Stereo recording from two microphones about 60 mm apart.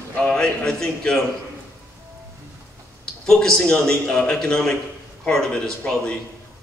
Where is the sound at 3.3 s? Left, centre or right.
Centre.